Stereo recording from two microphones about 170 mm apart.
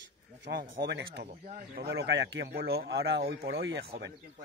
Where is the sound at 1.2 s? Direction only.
50° right (ahead or behind); by 3.8 s 75° right (ahead or behind).